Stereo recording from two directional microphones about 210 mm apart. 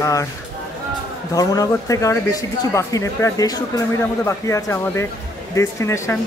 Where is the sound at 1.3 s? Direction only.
15° left (ahead or behind).